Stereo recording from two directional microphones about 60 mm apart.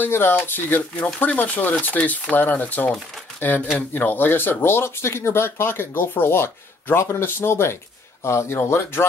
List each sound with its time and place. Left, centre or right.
0.0 s a man's voice: left